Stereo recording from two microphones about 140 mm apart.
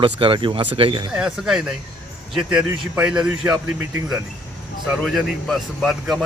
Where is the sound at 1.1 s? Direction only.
5° right (ahead or behind).